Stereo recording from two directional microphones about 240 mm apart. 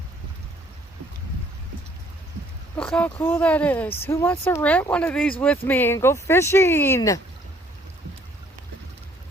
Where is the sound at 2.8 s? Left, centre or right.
Centre.